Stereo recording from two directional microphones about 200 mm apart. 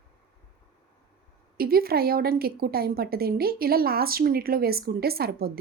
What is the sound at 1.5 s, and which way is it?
Speech, 50° right (ahead or behind).